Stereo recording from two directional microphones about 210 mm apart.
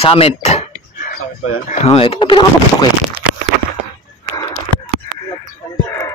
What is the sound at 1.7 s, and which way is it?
Speech, 30° left (ahead or behind).